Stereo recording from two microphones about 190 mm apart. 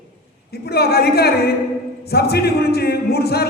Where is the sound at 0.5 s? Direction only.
55° left (ahead or behind).